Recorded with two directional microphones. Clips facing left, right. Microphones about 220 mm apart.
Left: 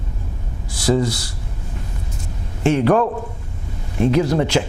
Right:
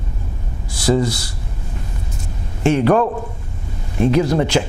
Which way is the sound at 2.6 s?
15° right (ahead or behind).